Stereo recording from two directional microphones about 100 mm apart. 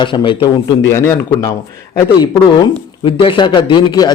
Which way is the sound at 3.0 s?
60° left (ahead or behind).